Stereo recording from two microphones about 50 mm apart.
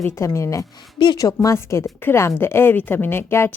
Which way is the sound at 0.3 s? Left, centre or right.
Left.